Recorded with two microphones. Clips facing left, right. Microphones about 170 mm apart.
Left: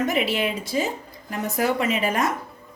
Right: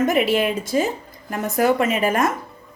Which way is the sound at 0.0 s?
50° right (ahead or behind).